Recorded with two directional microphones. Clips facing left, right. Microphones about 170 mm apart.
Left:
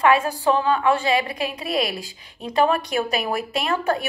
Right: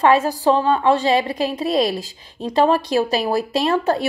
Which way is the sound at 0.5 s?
30° right (ahead or behind).